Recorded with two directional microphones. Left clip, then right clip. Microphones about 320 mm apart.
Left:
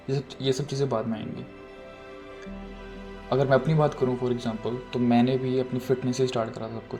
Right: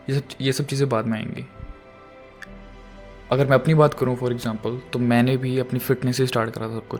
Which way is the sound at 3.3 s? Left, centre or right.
Right.